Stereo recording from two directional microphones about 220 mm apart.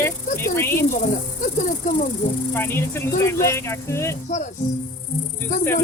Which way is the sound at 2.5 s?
10° left (ahead or behind).